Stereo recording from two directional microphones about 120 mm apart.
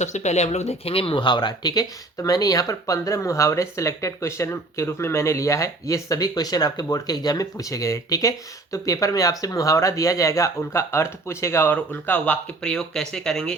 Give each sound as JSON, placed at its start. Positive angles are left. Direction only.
{"t": 0.0, "sound": "speech", "side_deg": 75}